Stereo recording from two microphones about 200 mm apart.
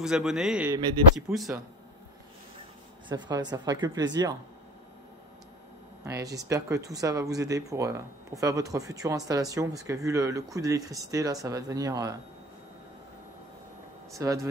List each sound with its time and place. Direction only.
0.0 s a man's voice: 5° right (ahead or behind)
3.1 s speech: 20° right (ahead or behind)
6.0 s speech: 15° right (ahead or behind)
14.1 s speech: 15° right (ahead or behind)